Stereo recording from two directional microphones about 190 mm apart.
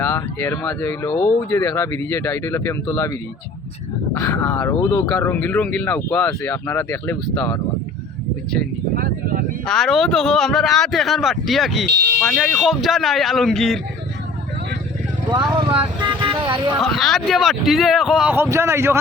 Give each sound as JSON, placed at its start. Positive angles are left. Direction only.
{"t": 0.0, "sound": "speech", "side_deg": 10}
{"t": 4.4, "sound": "speech", "side_deg": 10}
{"t": 4.9, "sound": "speech", "side_deg": 20}
{"t": 5.2, "sound": "speech", "side_deg": 10}
{"t": 9.0, "sound": "speech", "side_deg": -50}
{"t": 9.6, "sound": "speech", "side_deg": 0}
{"t": 15.3, "sound": "vehicle", "side_deg": -30}
{"t": 16.8, "sound": "speech", "side_deg": 0}